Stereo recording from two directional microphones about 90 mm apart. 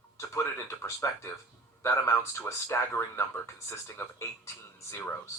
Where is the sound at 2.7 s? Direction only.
25° left (ahead or behind).